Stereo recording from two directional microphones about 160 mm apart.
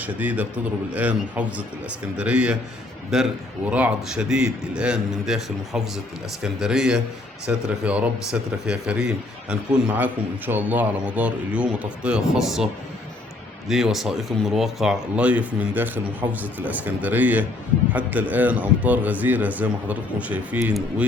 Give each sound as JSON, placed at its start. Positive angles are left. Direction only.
{"t": 0.0, "sound": "a man's voice", "side_deg": -10}
{"t": 13.7, "sound": "speech", "side_deg": 0}